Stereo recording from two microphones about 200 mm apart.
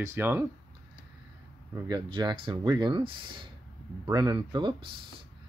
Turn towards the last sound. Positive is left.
turn(degrees=-25)  # may be behind; listen again after turning